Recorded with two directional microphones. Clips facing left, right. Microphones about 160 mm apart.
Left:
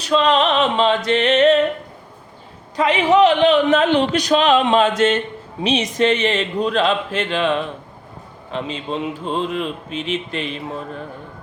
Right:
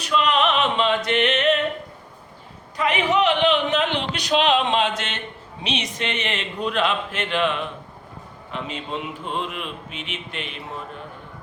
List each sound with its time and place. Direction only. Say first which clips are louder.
0.0 s music: left 4 dB; 30° left (ahead or behind)
2.9 s a man's voice: left 7 dB; 35° left (ahead or behind)
5.6 s mantra: left 10 dB; 40° left (ahead or behind)